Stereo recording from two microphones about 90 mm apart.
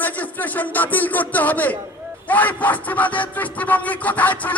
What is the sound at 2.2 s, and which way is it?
Music, 20° left (ahead or behind).